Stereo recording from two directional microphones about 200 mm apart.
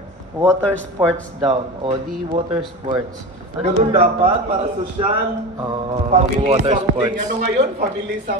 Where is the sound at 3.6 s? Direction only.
30° right (ahead or behind).